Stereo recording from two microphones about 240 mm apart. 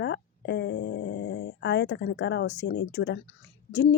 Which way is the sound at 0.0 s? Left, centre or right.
Left.